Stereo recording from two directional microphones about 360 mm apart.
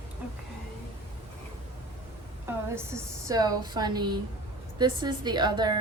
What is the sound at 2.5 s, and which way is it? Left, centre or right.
A woman's voice, centre.